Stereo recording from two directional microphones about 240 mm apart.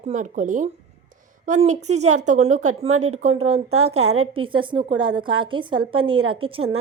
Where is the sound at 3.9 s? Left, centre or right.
Right.